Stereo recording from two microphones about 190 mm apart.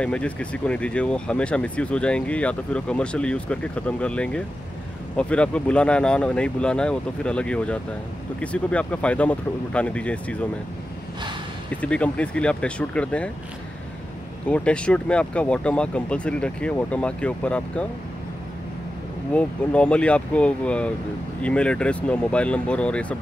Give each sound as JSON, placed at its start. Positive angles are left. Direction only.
{"t": 0.0, "sound": "speech", "side_deg": 5}
{"t": 11.7, "sound": "speech", "side_deg": 5}
{"t": 14.5, "sound": "speech", "side_deg": 5}
{"t": 19.3, "sound": "speech", "side_deg": 5}